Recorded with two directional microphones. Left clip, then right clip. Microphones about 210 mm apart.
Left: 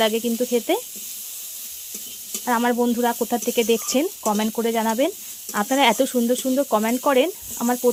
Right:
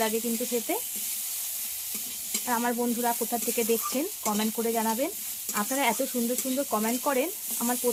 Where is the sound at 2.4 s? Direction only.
40° left (ahead or behind).